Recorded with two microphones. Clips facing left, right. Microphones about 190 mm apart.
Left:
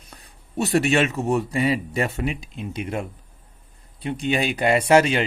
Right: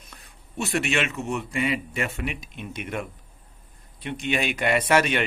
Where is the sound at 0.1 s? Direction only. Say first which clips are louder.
Left 8 dB; 40° left (ahead or behind).